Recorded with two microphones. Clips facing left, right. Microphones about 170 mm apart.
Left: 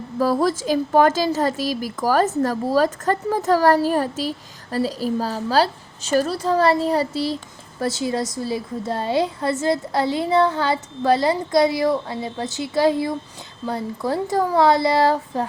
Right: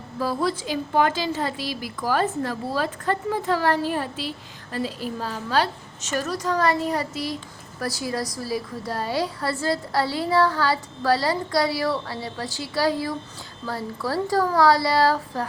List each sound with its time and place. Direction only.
0.2 s a woman's voice: 45° left (ahead or behind); by 15.4 s 20° left (ahead or behind)